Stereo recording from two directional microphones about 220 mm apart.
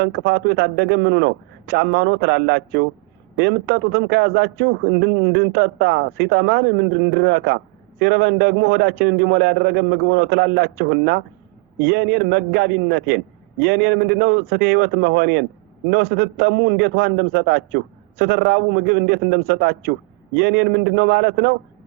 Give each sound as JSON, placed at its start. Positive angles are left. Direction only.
{"t": 0.0, "sound": "a man's voice", "side_deg": -50}